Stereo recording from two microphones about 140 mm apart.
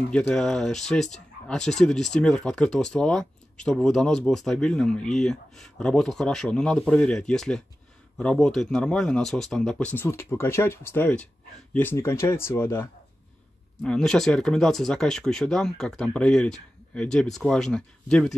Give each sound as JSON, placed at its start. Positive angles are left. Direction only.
{"t": 0.1, "sound": "speech", "side_deg": 5}
{"t": 13.8, "sound": "speech", "side_deg": 5}